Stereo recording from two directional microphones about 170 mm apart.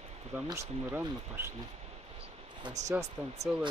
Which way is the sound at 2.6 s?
25° right (ahead or behind).